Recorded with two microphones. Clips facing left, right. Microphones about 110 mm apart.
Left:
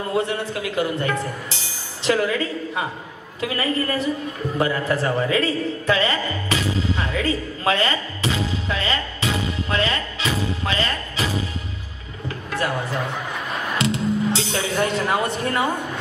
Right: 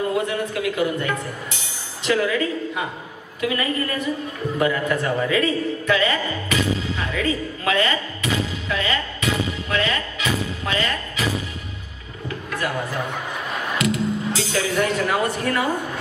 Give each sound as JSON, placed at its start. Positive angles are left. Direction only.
{"t": 0.3, "sound": "a woman's voice", "side_deg": 30}
{"t": 4.6, "sound": "a sound", "side_deg": 30}
{"t": 13.7, "sound": "speech", "side_deg": 25}